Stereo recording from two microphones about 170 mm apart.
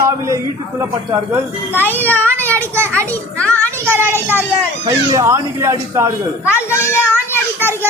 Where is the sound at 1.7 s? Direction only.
10° left (ahead or behind).